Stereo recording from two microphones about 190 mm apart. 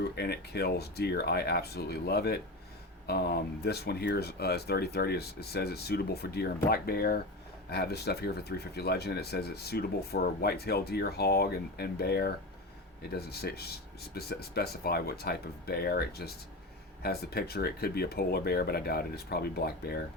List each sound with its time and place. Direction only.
0.2 s speech: 60° left (ahead or behind)